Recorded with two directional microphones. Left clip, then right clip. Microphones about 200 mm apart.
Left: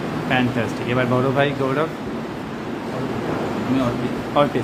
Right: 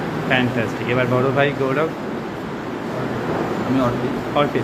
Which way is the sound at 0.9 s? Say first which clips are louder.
Right 1 dB; 15° left (ahead or behind).